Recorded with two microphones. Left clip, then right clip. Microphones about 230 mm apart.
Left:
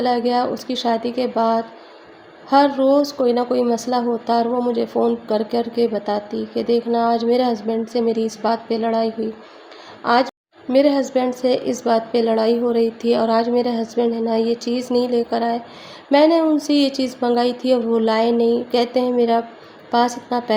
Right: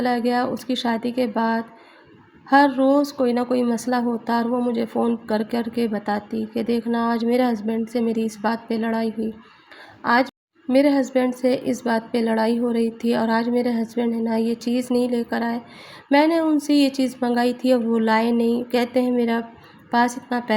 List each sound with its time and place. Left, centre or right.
0.0 s a woman's voice: right